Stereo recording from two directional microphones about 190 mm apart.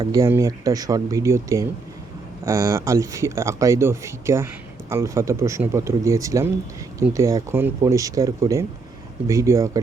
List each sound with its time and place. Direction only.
0.0 s speech: 20° right (ahead or behind)